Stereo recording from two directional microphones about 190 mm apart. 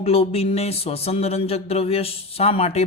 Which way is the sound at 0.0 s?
30° left (ahead or behind).